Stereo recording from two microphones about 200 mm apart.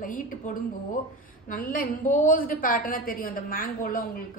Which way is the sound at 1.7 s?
45° left (ahead or behind).